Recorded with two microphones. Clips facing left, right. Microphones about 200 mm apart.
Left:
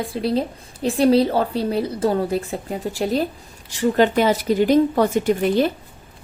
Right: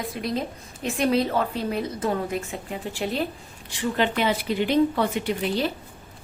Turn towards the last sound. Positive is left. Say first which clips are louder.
# left 7 dB
turn(degrees=50)  # may be behind; listen again after turning